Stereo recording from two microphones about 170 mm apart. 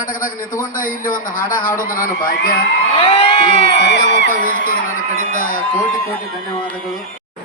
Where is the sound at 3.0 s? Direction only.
30° left (ahead or behind).